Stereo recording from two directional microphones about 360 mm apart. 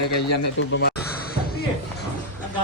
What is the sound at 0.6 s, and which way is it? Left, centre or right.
Speech, left.